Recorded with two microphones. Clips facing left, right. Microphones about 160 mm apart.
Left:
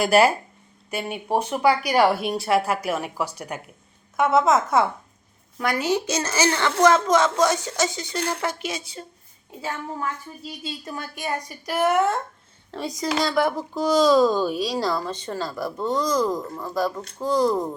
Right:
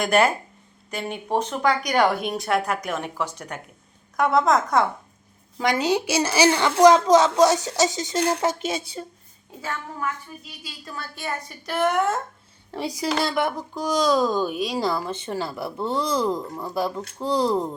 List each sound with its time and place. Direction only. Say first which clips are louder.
0.0 s speech: left 2 dB; 5° left (ahead or behind)
5.7 s speech: right 1 dB; 15° right (ahead or behind)
9.6 s a woman's voice: left 1 dB; 25° left (ahead or behind); by 12.2 s centre (ahead or behind)
12.7 s speech: even; 10° right (ahead or behind)